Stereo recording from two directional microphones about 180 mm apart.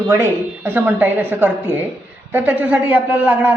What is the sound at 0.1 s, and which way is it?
A woman's voice, 15° right (ahead or behind).